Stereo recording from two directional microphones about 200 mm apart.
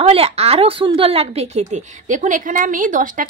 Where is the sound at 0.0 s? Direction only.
30° right (ahead or behind).